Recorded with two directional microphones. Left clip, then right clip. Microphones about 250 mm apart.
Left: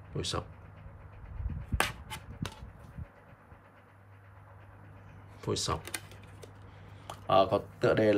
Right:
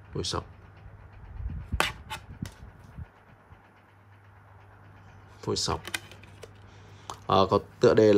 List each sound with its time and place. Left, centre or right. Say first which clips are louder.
0.1 s speech: right 3 dB; centre
1.8 s a sound: right 4 dB; centre
5.4 s typing: right 4 dB; centre
7.1 s speech: right 2 dB; centre